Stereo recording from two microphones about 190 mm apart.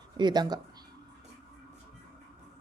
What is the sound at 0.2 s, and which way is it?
Speech, 20° right (ahead or behind).